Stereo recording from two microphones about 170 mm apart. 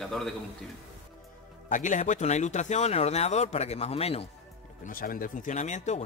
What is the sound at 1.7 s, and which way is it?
Speech, 50° left (ahead or behind).